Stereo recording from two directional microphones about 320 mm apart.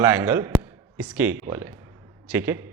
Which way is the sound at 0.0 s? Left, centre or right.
Centre.